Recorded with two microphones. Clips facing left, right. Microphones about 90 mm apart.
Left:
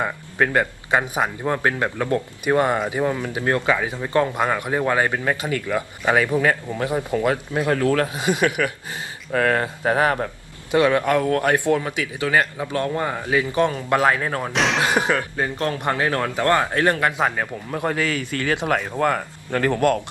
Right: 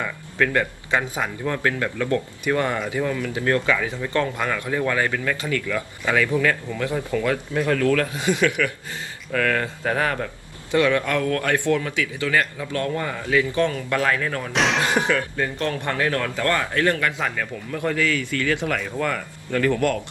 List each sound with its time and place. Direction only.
0.0 s speech: 25° left (ahead or behind)
9.3 s speech: 35° left (ahead or behind)
14.5 s speech: centre (ahead or behind)
14.8 s speech: 20° left (ahead or behind)
17.2 s speech: 35° left (ahead or behind)
17.9 s speech: 25° left (ahead or behind)
19.0 s speech: 50° left (ahead or behind)